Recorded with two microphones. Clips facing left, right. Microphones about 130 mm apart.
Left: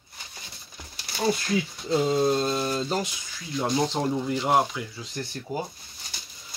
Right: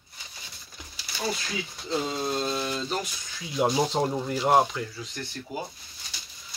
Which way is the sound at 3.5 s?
5° right (ahead or behind).